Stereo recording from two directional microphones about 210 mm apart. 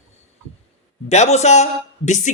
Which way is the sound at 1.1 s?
30° left (ahead or behind).